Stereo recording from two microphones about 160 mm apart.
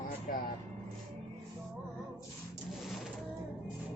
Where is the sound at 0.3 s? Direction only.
65° left (ahead or behind).